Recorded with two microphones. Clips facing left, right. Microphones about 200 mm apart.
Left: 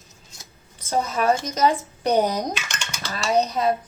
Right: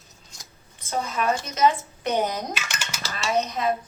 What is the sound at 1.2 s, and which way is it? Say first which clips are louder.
A woman's voice: left 1 dB; 35° left (ahead or behind).